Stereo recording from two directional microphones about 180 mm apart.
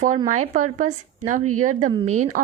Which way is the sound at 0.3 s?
45° right (ahead or behind).